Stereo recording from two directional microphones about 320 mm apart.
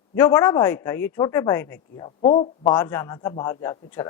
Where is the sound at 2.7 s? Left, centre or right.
Centre.